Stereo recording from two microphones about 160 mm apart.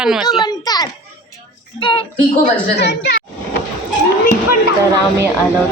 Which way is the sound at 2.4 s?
90° left.